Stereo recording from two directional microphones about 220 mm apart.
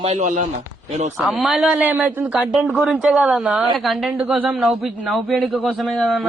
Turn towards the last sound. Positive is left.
turn(degrees=0)  # may be behind; listen again after turning